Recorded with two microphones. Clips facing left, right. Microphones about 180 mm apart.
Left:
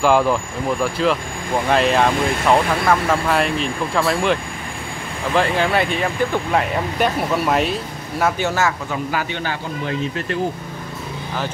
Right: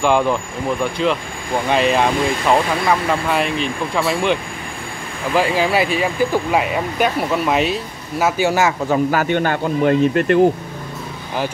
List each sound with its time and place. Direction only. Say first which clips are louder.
0.0 s speech: even; centre (ahead or behind); by 8.7 s 15° right (ahead or behind)
8.9 s speech: right 7 dB; 50° right (ahead or behind)